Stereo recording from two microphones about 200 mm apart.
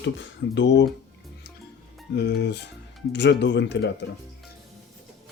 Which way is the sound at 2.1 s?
55° left (ahead or behind).